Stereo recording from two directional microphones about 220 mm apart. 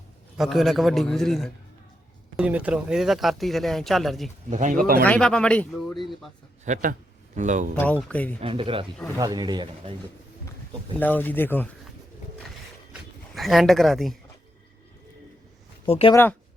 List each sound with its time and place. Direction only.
0.3 s speech: centre (ahead or behind)
4.4 s speech: 35° right (ahead or behind)
5.0 s speech: 5° left (ahead or behind)
6.7 s speech: 35° right (ahead or behind)
7.8 s speech: 5° left (ahead or behind)
8.4 s speech: 25° right (ahead or behind)
11.0 s speech: 10° left (ahead or behind)
12.9 s a sound: centre (ahead or behind)
15.9 s speech: 25° left (ahead or behind)